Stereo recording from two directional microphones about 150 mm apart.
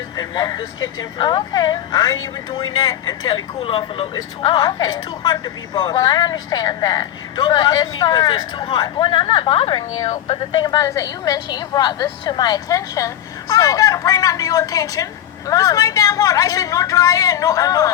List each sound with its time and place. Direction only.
0.2 s a woman's voice: 25° left (ahead or behind)